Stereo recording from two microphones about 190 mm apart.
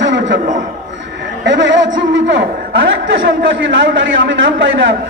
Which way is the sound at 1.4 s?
70° right (ahead or behind).